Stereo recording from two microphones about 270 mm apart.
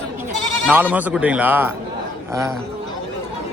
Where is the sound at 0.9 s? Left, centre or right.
Centre.